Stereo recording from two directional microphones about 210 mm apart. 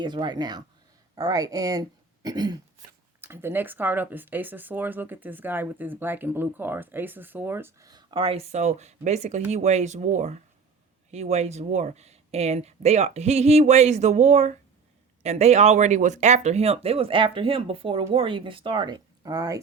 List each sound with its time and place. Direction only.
0.0 s speech: 20° right (ahead or behind)